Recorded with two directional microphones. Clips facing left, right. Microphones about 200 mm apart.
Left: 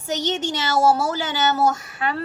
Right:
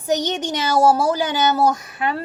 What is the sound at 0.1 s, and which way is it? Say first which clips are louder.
A child's voice: right 3 dB; 20° right (ahead or behind).